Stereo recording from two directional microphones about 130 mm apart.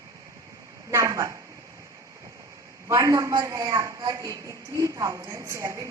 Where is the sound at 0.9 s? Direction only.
25° right (ahead or behind).